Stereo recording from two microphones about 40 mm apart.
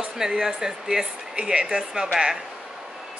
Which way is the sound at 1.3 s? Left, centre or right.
Right.